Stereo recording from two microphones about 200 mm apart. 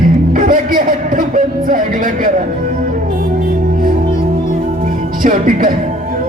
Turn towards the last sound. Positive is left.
turn(degrees=-45)  # may be behind; listen again after turning